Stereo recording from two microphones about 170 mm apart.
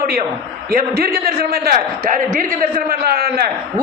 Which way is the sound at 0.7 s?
60° right (ahead or behind).